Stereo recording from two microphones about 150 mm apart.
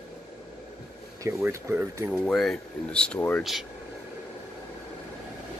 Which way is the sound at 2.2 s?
5° left (ahead or behind).